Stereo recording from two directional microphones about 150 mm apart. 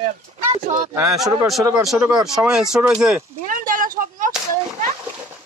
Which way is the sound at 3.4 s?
65° right (ahead or behind).